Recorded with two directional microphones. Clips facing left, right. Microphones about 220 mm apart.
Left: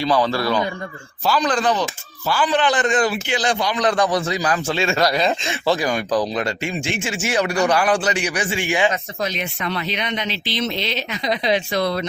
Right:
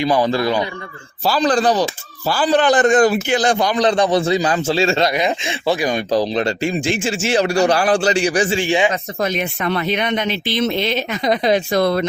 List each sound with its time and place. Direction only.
0.0 s speech: 15° right (ahead or behind)
1.2 s speech: 35° right (ahead or behind)
3.8 s a man's voice: 30° right (ahead or behind)
9.2 s speech: 50° right (ahead or behind)